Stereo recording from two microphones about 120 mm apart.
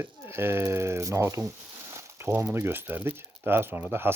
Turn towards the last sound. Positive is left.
turn(degrees=-20)  # may be behind; listen again after turning